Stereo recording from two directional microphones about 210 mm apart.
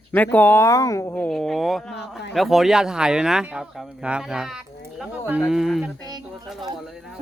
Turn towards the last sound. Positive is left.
turn(degrees=0)  # may be behind; listen again after turning